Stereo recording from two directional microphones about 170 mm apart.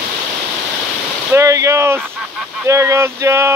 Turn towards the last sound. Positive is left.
turn(degrees=-15)  # may be behind; listen again after turning